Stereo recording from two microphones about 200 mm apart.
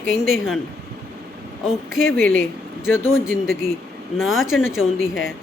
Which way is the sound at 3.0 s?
10° left (ahead or behind).